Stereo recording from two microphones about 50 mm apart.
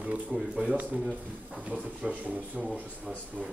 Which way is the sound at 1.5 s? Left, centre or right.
Right.